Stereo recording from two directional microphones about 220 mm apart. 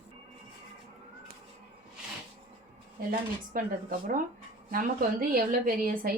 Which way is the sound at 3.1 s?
40° right (ahead or behind).